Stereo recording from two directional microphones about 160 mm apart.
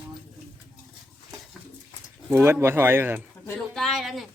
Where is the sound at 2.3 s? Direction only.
15° right (ahead or behind).